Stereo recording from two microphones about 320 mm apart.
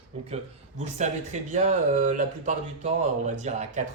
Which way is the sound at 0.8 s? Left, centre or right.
Right.